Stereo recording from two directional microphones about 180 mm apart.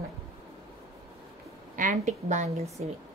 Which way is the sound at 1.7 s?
45° right (ahead or behind).